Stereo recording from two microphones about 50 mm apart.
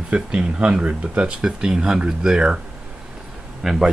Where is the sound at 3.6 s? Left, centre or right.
Centre.